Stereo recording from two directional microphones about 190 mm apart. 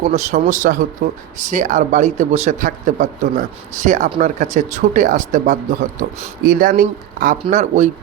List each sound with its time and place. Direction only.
0.0 s speech: 40° right (ahead or behind)